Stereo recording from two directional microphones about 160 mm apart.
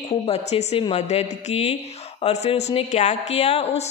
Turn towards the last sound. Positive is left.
turn(degrees=40)  # may be behind; listen again after turning